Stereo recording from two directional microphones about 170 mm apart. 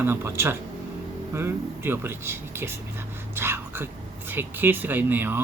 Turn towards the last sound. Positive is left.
turn(degrees=-10)  # may be behind; listen again after turning